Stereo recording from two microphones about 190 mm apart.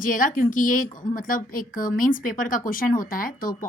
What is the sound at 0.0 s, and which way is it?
A woman's voice, 45° left (ahead or behind).